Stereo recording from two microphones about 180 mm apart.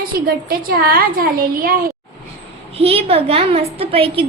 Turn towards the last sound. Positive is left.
turn(degrees=-30)  # may be behind; listen again after turning